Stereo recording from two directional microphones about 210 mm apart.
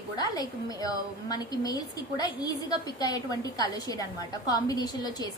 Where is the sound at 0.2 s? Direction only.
20° left (ahead or behind).